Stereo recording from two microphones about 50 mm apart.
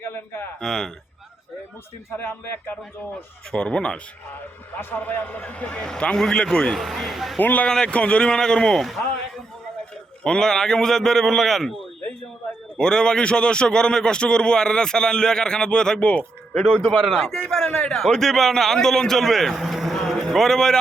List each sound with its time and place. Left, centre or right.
0.0 s a sound: left
0.6 s a man's voice: centre
2.1 s speech: left
3.5 s speech: centre
4.8 s a man's voice: left; by 6.7 s centre
6.7 s a man's voice: centre
7.3 s speech: left
7.7 s a man's voice: centre
10.2 s a man's voice: centre
12.7 s a man's voice: centre
16.0 s speech: left
17.1 s a man's voice: centre